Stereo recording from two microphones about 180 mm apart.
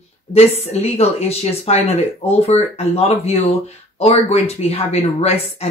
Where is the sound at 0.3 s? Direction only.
35° left (ahead or behind).